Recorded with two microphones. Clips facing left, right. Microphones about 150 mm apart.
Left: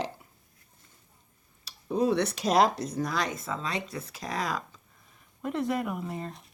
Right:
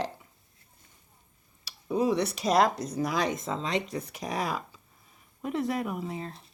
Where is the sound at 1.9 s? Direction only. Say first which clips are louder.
Even; 5° right (ahead or behind).